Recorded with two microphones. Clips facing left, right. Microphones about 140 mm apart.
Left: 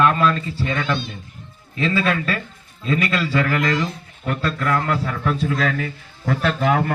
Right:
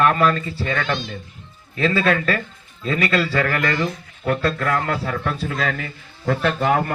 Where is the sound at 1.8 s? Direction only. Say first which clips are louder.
Right 2 dB; 40° right (ahead or behind).